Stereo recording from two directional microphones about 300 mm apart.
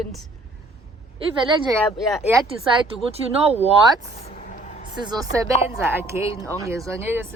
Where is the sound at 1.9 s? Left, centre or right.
Centre.